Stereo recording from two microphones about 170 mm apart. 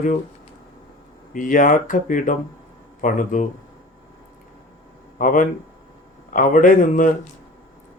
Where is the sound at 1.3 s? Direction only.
50° left (ahead or behind).